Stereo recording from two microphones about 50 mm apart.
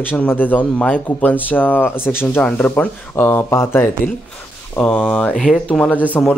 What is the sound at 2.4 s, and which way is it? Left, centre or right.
Speech, left.